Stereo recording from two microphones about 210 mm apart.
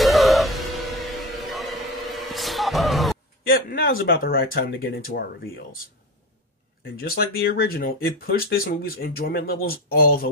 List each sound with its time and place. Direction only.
0.0 s music: centre (ahead or behind)
3.4 s speech: 45° left (ahead or behind)
7.0 s speech: 45° left (ahead or behind)